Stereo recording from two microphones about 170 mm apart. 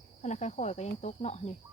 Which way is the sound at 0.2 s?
45° left (ahead or behind).